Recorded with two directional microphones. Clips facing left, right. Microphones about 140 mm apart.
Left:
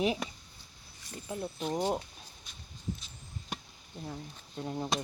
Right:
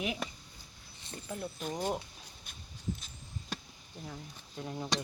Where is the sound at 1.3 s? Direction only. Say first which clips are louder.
Left 4 dB; 20° left (ahead or behind).